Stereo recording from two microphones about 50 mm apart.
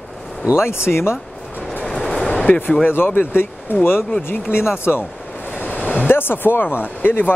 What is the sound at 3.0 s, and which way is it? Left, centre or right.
Speech, left.